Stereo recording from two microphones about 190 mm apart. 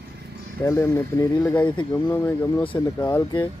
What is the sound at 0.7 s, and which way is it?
Speech, 15° left (ahead or behind).